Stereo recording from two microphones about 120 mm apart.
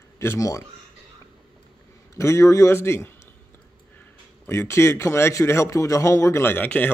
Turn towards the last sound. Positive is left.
turn(degrees=15)  # may be behind; listen again after turning